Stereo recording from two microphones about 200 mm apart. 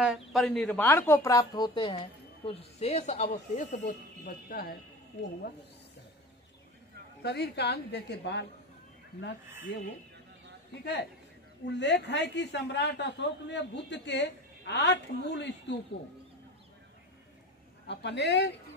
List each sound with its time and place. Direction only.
0.0 s speech: centre (ahead or behind); by 2.0 s 20° left (ahead or behind)
2.4 s speech: 30° left (ahead or behind)
7.2 s a man's voice: 55° left (ahead or behind)
17.8 s a man's voice: 60° left (ahead or behind)